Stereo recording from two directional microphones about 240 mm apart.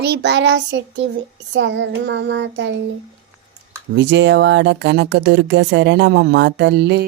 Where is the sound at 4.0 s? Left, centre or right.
Right.